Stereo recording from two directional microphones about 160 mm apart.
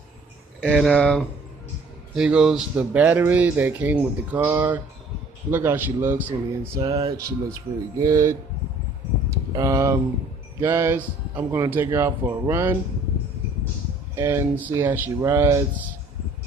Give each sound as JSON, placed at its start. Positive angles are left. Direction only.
{"t": 0.7, "sound": "speech", "side_deg": 5}
{"t": 2.1, "sound": "speech", "side_deg": -5}
{"t": 9.5, "sound": "speech", "side_deg": -20}
{"t": 14.1, "sound": "speech", "side_deg": -15}